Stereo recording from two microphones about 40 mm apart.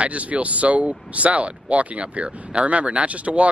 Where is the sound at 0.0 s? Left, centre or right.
Right.